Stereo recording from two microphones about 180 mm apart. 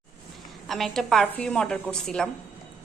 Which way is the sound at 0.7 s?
Centre (ahead or behind).